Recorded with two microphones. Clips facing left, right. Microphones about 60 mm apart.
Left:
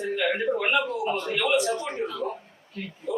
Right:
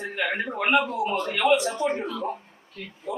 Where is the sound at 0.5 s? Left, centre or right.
Right.